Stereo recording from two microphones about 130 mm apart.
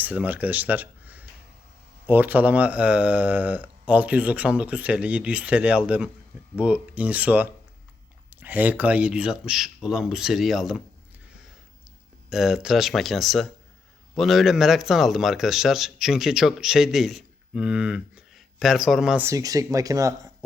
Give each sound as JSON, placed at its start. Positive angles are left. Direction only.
{"t": 0.0, "sound": "speech", "side_deg": -10}
{"t": 12.3, "sound": "speech", "side_deg": -5}
{"t": 19.2, "sound": "speech", "side_deg": -25}